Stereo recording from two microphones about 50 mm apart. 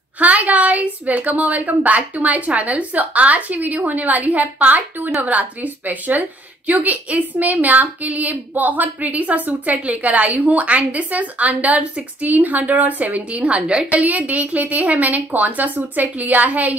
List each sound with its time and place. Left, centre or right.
0.2 s a woman's voice: right
13.8 s a woman's voice: right